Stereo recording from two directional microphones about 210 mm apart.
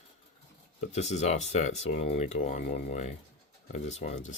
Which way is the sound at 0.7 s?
30° left (ahead or behind).